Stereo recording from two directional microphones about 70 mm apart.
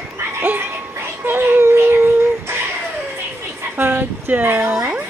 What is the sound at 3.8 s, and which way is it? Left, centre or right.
Speech, right.